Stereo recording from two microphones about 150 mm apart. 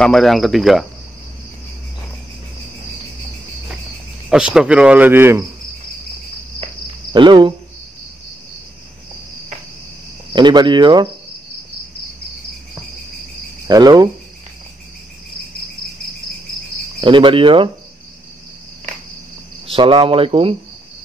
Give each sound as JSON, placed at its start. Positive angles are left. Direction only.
{"t": 0.0, "sound": "cricket", "side_deg": 0}
{"t": 4.3, "sound": "speech", "side_deg": -5}
{"t": 7.1, "sound": "speech", "side_deg": -30}
{"t": 10.3, "sound": "speech", "side_deg": -30}
{"t": 13.7, "sound": "speech", "side_deg": -25}
{"t": 17.0, "sound": "speech", "side_deg": -35}
{"t": 19.7, "sound": "speech", "side_deg": -35}